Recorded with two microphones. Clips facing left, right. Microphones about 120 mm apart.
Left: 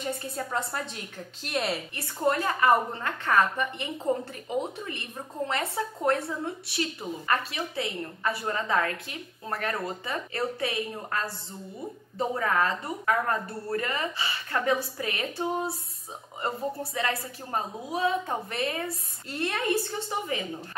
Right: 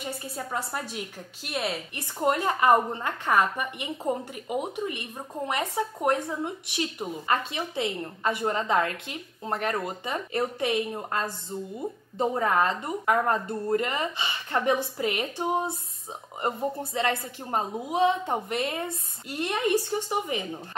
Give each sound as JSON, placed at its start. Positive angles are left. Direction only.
{"t": 0.5, "sound": "a woman's voice", "side_deg": -10}
{"t": 2.0, "sound": "a woman's voice", "side_deg": -20}